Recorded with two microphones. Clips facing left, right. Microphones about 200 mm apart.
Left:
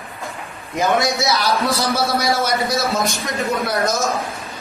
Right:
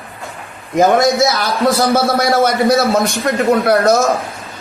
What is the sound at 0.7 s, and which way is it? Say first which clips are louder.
A man's voice: right 7 dB; 50° right (ahead or behind).